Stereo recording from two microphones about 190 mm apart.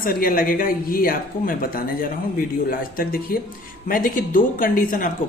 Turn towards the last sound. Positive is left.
turn(degrees=45)  # may be behind; listen again after turning